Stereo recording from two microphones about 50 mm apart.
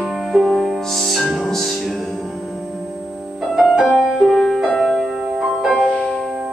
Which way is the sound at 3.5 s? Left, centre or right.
Centre.